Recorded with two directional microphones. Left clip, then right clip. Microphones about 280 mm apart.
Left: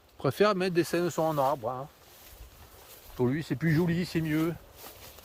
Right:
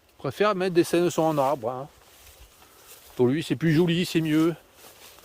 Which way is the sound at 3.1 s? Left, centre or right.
Right.